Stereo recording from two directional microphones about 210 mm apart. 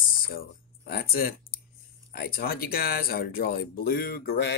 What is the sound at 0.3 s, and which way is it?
Speech, 45° left (ahead or behind).